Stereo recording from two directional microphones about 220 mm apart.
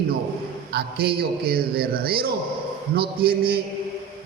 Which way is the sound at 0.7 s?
45° right (ahead or behind).